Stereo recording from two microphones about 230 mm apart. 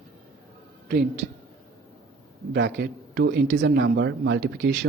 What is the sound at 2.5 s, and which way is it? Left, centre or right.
Speech, right.